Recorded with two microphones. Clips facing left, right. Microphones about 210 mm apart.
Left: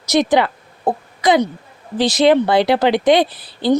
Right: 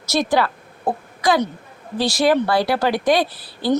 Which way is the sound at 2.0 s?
20° left (ahead or behind).